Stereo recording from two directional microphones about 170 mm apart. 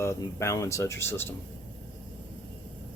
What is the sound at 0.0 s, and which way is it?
Speech, 15° left (ahead or behind).